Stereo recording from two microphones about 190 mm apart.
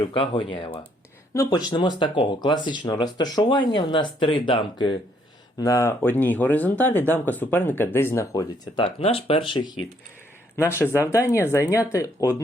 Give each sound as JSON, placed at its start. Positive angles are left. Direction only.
{"t": 0.0, "sound": "speech", "side_deg": 25}
{"t": 10.7, "sound": "speech", "side_deg": 10}